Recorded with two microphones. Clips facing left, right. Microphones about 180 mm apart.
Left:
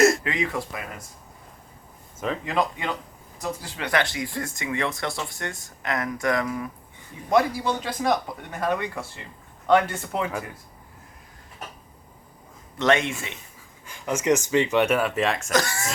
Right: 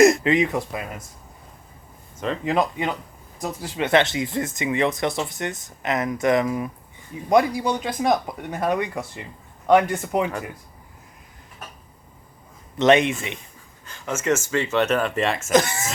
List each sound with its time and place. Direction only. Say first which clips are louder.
0.0 s speech: right 5 dB; 20° right (ahead or behind)
2.4 s speech: right 6 dB; 20° right (ahead or behind)
12.8 s speech: right 5 dB; 20° right (ahead or behind)
13.8 s speech: left 1 dB; 15° left (ahead or behind); by 15.5 s centre (ahead or behind)
15.5 s speech: right 9 dB; 20° right (ahead or behind)